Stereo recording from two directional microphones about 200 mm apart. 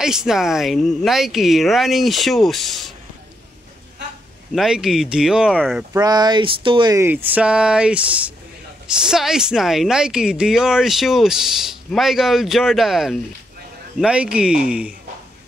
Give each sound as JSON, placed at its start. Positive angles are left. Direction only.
{"t": 0.0, "sound": "speech", "side_deg": -5}
{"t": 4.6, "sound": "speech", "side_deg": -5}
{"t": 5.9, "sound": "speech", "side_deg": -20}